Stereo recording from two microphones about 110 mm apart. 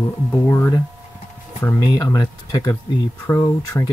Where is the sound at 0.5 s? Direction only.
30° left (ahead or behind).